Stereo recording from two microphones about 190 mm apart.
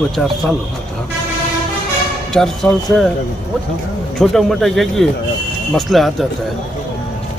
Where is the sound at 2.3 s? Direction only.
Centre (ahead or behind).